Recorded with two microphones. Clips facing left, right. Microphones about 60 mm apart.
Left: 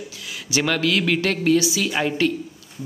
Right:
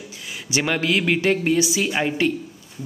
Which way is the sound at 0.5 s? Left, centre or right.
Right.